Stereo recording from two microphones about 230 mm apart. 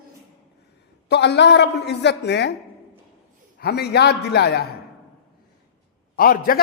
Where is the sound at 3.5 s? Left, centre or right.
Left.